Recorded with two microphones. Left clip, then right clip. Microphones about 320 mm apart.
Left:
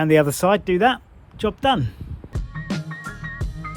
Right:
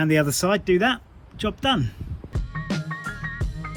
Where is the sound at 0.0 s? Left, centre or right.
Left.